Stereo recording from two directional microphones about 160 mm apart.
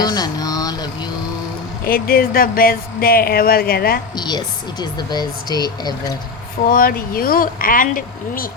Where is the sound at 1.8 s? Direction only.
65° left (ahead or behind).